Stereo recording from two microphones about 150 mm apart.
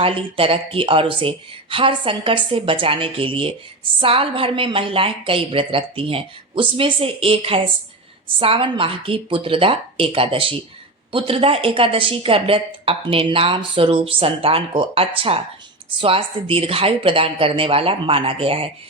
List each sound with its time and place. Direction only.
0.0 s a woman's voice: 35° right (ahead or behind)